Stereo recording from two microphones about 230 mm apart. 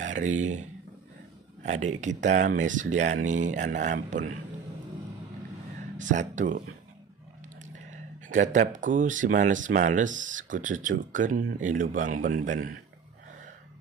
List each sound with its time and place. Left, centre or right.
0.0 s speech: right
5.9 s speech: right
8.3 s speech: right